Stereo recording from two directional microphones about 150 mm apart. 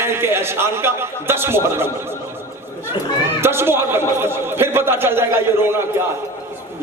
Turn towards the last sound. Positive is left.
turn(degrees=-15)  # may be behind; listen again after turning